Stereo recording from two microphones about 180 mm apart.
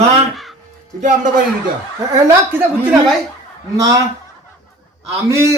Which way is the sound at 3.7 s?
20° right (ahead or behind).